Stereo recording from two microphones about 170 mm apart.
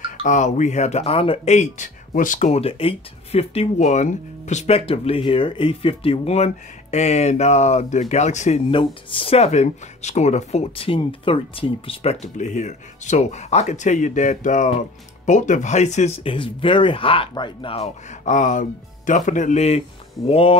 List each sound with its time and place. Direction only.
0.2 s speech: 45° left (ahead or behind)
18.3 s speech: 50° left (ahead or behind)